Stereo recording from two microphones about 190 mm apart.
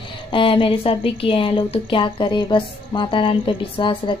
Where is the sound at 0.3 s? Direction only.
25° left (ahead or behind).